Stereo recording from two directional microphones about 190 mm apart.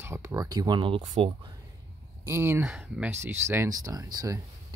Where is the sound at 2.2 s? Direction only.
10° right (ahead or behind).